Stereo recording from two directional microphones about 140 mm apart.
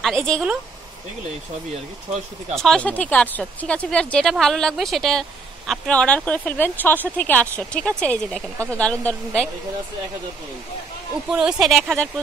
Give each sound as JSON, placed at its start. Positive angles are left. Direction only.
{"t": 0.0, "sound": "a woman's voice", "side_deg": 5}
{"t": 2.6, "sound": "speech", "side_deg": 5}
{"t": 11.3, "sound": "speech", "side_deg": -5}